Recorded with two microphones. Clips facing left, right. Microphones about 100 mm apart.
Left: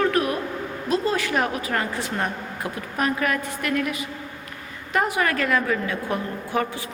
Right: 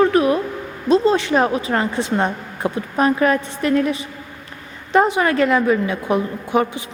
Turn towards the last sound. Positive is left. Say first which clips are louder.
# right 6 dB
turn(degrees=-20)  # may be behind; listen again after turning